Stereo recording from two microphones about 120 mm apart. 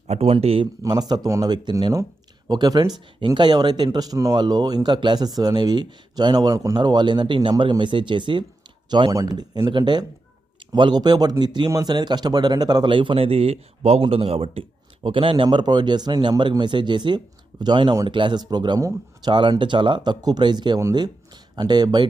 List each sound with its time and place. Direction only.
0.1 s speech: 50° right (ahead or behind)
0.8 s speech: 35° right (ahead or behind)
18.8 s speech: 25° right (ahead or behind)
19.3 s speech: 40° right (ahead or behind)